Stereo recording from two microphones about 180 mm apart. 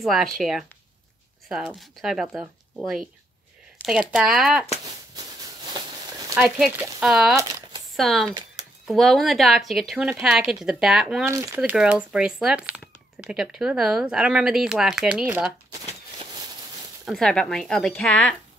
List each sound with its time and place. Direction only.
0.0 s a woman's voice: centre (ahead or behind)
1.7 s a woman's voice: centre (ahead or behind)
5.1 s a sound: 20° right (ahead or behind)
6.6 s a woman's voice: centre (ahead or behind)
11.2 s a woman's voice: 15° right (ahead or behind)
17.0 s a woman's voice: centre (ahead or behind)